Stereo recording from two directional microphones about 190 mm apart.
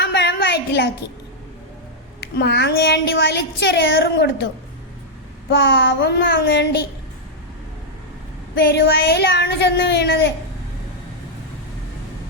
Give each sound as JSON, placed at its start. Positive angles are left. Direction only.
{"t": 0.0, "sound": "a sound", "side_deg": 65}
{"t": 2.3, "sound": "speech", "side_deg": 65}
{"t": 5.5, "sound": "speech", "side_deg": 65}
{"t": 8.5, "sound": "speech", "side_deg": 60}